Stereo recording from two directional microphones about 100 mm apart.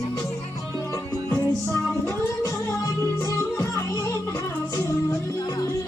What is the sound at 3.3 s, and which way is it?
Music, 30° left (ahead or behind).